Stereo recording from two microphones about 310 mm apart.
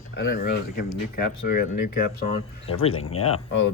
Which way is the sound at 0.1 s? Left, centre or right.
Left.